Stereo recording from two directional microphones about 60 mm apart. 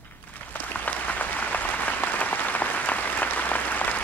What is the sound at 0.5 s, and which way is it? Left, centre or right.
Applause, left.